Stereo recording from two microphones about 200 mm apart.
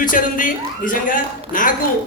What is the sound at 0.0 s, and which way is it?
A man's voice, 40° left (ahead or behind).